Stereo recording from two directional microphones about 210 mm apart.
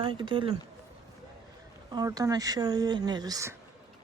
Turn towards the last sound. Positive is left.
turn(degrees=-15)  # may be behind; listen again after turning